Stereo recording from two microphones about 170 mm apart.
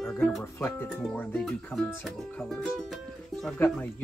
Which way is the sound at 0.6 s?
5° left (ahead or behind).